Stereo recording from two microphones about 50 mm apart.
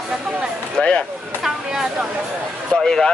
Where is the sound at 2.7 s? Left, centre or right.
Centre.